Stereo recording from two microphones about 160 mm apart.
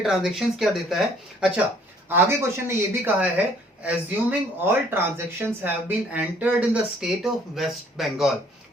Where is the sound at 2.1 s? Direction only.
15° right (ahead or behind).